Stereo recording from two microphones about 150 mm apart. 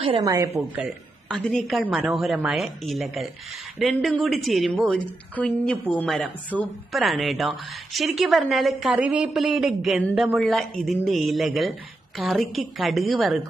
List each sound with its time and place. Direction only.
0.2 s a woman's voice: 25° right (ahead or behind)
0.7 s a woman's voice: centre (ahead or behind)